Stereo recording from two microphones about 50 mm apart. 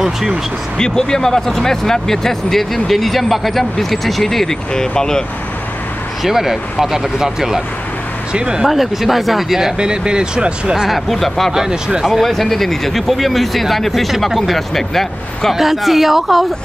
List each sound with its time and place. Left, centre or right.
0.0 s speech: centre
0.7 s speech: centre
6.2 s speech: centre
8.6 s speech: centre
10.9 s speech: centre
11.5 s speech: centre
12.2 s speech: centre